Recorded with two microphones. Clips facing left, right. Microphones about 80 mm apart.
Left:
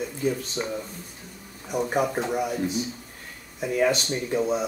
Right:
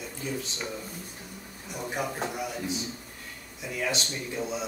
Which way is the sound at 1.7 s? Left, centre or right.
Left.